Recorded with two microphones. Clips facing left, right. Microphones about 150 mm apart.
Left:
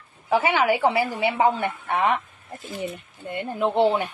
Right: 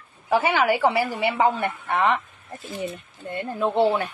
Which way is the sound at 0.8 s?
20° left (ahead or behind).